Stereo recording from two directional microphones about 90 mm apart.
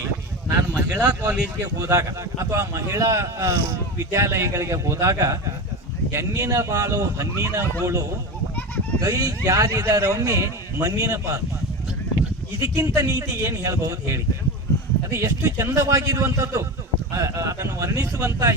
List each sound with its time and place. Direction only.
0.7 s speech: 20° right (ahead or behind)
1.8 s speech: 35° right (ahead or behind)
12.5 s speech: 35° right (ahead or behind)
15.2 s speech: 35° right (ahead or behind)